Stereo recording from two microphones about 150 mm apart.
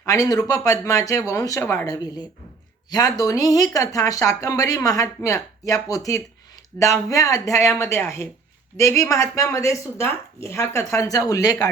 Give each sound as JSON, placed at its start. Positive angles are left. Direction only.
{"t": 0.0, "sound": "speech", "side_deg": 25}